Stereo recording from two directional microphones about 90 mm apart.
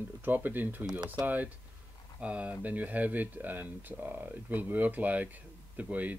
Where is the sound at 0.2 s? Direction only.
20° right (ahead or behind).